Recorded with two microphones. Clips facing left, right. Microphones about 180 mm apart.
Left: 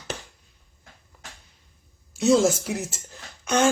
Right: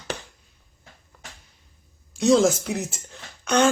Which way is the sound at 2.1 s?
5° left (ahead or behind).